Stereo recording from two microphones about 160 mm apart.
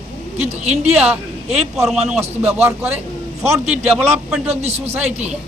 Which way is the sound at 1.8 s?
5° right (ahead or behind).